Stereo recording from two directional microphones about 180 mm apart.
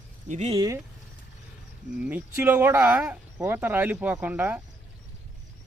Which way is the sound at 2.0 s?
10° right (ahead or behind).